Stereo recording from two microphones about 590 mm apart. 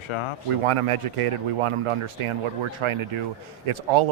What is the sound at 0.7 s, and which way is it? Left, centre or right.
A man's voice, right.